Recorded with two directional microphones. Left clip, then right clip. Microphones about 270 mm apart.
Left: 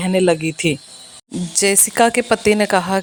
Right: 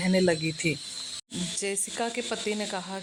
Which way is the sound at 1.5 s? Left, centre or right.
Left.